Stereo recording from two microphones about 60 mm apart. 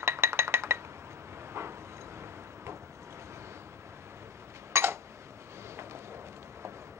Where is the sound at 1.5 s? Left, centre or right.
Right.